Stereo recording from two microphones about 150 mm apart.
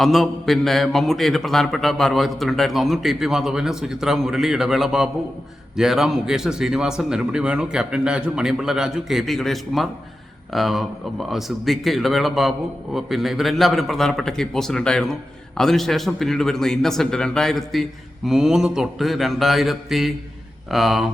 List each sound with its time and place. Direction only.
0.0 s a man's voice: centre (ahead or behind)